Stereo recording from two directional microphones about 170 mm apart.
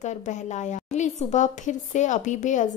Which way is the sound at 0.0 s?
45° left (ahead or behind).